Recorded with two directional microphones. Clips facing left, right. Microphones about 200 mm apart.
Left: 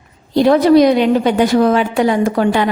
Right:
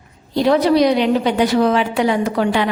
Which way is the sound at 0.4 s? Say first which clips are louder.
Left 4 dB; 50° left (ahead or behind).